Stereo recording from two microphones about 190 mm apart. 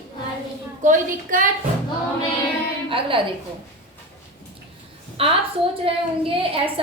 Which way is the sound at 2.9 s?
30° right (ahead or behind).